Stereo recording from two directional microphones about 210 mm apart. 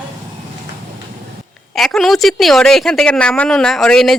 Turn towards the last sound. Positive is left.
turn(degrees=5)  # may be behind; listen again after turning